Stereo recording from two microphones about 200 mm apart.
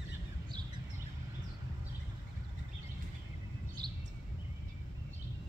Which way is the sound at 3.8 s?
20° right (ahead or behind).